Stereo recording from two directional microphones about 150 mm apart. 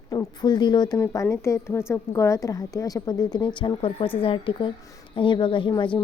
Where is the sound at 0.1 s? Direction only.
25° left (ahead or behind).